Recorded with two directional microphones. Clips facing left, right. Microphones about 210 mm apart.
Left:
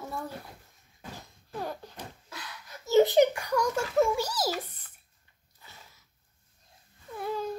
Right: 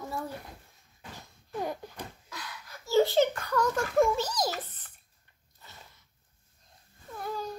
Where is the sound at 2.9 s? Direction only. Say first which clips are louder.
Left 3 dB; 20° left (ahead or behind).